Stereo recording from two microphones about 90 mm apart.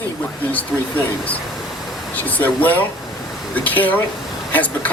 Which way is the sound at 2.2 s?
20° left (ahead or behind).